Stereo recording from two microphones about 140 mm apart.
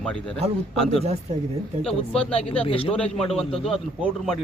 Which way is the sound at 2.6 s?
40° left (ahead or behind).